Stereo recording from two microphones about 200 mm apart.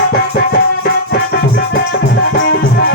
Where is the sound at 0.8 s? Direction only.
55° left (ahead or behind).